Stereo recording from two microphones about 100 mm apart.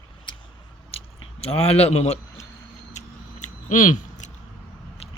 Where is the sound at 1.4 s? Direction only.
90° left.